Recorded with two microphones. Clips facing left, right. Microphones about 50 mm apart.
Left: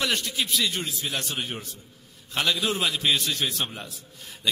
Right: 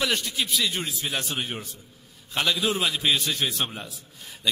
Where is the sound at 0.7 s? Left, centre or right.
Centre.